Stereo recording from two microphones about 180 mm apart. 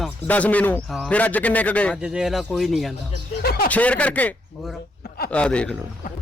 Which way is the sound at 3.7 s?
10° left (ahead or behind).